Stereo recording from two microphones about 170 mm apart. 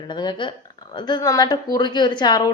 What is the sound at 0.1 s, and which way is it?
A woman's voice, 25° left (ahead or behind).